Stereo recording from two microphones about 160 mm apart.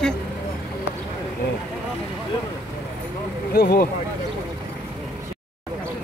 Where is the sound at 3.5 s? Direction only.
75° left (ahead or behind).